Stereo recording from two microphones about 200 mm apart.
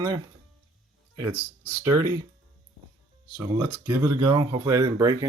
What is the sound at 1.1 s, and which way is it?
Speech, 10° right (ahead or behind).